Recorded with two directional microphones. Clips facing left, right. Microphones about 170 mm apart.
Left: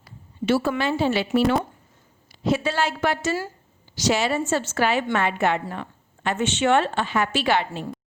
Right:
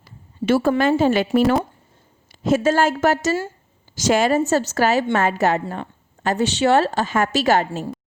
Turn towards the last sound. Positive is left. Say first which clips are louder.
# right 4 dB
turn(degrees=-45)  # may be behind; listen again after turning